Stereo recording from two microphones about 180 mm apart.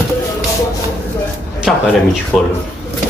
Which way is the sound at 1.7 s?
Centre (ahead or behind).